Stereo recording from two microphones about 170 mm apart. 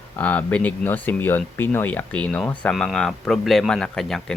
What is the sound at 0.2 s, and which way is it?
Speech, 10° left (ahead or behind).